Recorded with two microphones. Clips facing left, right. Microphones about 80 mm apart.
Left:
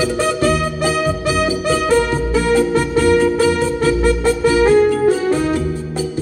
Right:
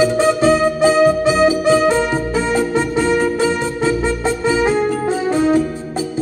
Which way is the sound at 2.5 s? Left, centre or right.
Centre.